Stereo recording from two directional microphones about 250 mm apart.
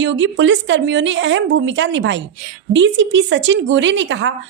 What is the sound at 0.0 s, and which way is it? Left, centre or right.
A woman's voice, right.